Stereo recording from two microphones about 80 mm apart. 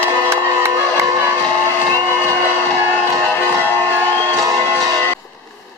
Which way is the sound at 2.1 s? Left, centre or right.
Left.